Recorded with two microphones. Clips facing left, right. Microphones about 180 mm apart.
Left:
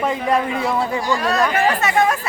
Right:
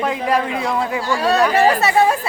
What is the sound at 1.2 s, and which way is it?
Speech, 30° right (ahead or behind).